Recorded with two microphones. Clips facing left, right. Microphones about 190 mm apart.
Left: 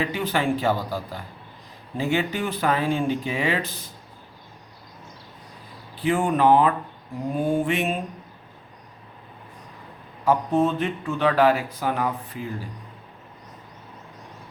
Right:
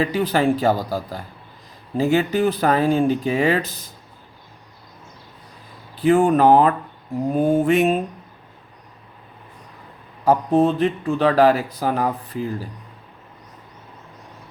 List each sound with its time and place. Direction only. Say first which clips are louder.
0.0 s speech: right 5 dB; 40° right (ahead or behind)
6.0 s speech: right 6 dB; 40° right (ahead or behind)
7.3 s mantra: right 6 dB; 40° right (ahead or behind)
10.2 s speech: right 4 dB; 35° right (ahead or behind)